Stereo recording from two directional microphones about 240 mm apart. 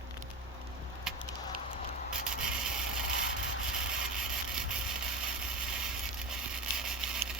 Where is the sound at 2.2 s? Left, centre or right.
Centre.